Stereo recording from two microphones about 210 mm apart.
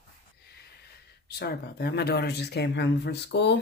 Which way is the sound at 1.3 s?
50° left (ahead or behind).